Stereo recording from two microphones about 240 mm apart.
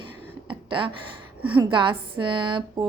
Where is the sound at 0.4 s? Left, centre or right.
Right.